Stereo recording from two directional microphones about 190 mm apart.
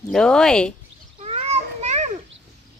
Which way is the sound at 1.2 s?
35° right (ahead or behind).